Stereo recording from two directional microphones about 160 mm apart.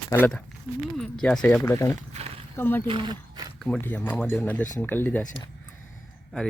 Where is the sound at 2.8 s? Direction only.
30° right (ahead or behind).